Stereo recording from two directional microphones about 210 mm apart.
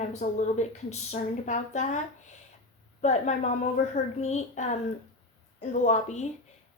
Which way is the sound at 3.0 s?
35° left (ahead or behind).